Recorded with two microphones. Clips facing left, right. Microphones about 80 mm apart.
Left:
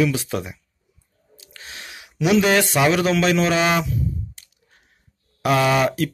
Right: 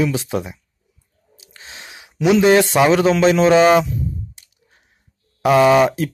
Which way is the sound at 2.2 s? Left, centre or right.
Right.